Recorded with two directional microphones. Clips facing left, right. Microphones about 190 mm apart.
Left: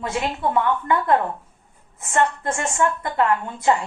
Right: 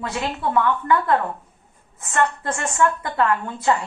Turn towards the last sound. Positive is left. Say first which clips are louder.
# left 1 dB
turn(degrees=20)  # may be behind; listen again after turning